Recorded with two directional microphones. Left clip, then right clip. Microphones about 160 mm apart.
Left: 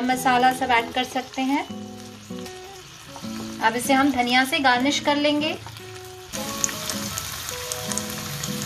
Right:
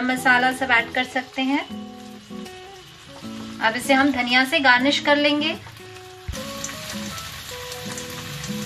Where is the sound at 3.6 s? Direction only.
25° left (ahead or behind).